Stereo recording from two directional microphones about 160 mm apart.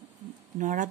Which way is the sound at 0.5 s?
50° right (ahead or behind).